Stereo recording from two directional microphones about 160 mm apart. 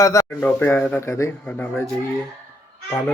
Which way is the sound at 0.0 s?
20° left (ahead or behind).